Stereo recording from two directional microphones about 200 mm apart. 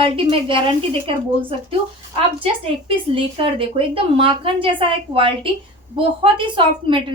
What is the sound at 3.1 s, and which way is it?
A woman's voice, 25° right (ahead or behind).